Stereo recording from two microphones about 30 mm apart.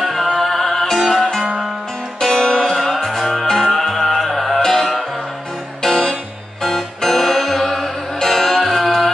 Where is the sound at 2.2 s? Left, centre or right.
Centre.